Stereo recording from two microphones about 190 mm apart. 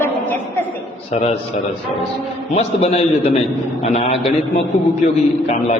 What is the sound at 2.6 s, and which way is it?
A man's voice, 35° left (ahead or behind).